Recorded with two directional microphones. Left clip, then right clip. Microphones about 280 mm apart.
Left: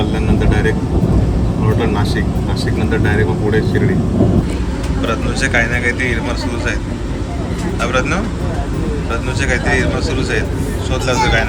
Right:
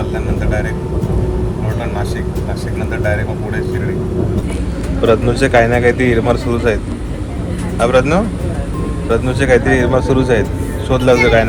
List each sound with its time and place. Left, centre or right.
5.0 s speech: centre
7.8 s speech: centre